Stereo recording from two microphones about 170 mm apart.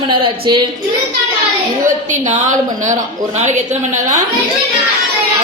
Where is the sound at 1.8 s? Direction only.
45° right (ahead or behind).